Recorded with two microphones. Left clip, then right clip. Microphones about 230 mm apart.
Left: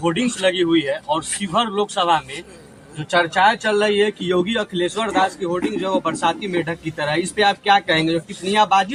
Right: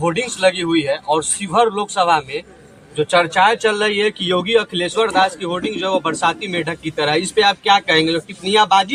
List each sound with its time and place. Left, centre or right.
0.6 s speech: right
3.2 s speech: right